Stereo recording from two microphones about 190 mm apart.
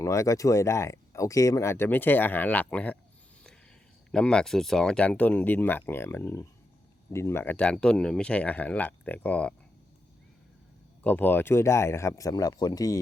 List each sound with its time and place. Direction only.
0.0 s speech: 15° left (ahead or behind)
4.1 s speech: 5° left (ahead or behind)
11.0 s speech: 10° left (ahead or behind)